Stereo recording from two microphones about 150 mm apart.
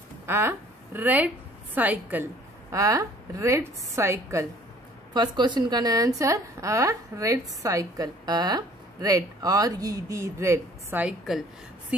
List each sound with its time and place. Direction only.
0.3 s a woman's voice: 15° right (ahead or behind)
5.1 s a woman's voice: 30° right (ahead or behind); by 11.4 s 5° right (ahead or behind)